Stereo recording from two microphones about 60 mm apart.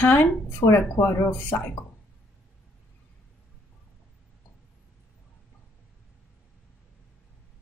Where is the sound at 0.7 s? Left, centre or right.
Left.